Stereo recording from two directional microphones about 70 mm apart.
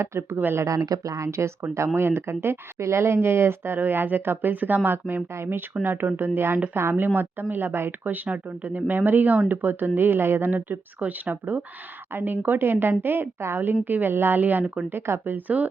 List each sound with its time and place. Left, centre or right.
0.0 s speech: right
0.6 s a woman's voice: right